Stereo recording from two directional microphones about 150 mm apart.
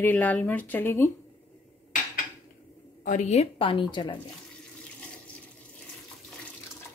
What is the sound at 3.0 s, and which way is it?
A woman's voice, 55° left (ahead or behind).